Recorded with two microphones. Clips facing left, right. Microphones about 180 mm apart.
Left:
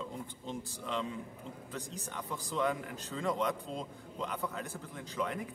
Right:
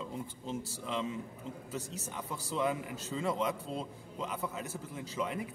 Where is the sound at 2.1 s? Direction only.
10° right (ahead or behind).